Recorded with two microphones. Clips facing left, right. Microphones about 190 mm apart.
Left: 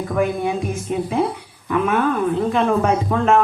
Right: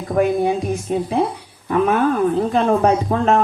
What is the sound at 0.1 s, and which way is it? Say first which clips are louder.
Music: right 5 dB; 35° right (ahead or behind).